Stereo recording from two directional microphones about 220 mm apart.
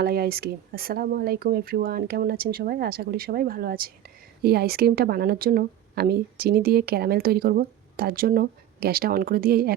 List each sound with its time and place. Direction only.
0.0 s a woman's voice: 45° right (ahead or behind)